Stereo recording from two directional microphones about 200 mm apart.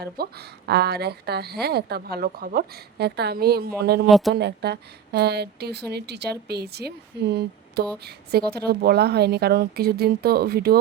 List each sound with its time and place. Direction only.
0.0 s speech: 55° right (ahead or behind)
4.0 s speech: centre (ahead or behind)
4.4 s a woman's voice: 55° right (ahead or behind)